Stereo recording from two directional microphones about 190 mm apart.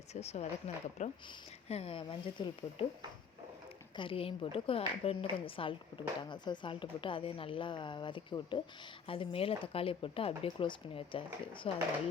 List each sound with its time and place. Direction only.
0.1 s a woman's voice: 35° left (ahead or behind)
3.9 s a woman's voice: 30° left (ahead or behind)